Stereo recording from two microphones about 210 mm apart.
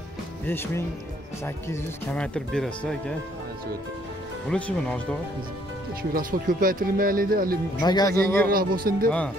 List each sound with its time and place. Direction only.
0.5 s speech: 10° left (ahead or behind)
4.5 s speech: 5° left (ahead or behind)
6.1 s speech: 40° right (ahead or behind)
7.8 s speech: 20° left (ahead or behind)
8.5 s speech: 45° right (ahead or behind)